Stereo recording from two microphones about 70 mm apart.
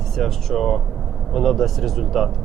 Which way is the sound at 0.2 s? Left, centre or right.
Centre.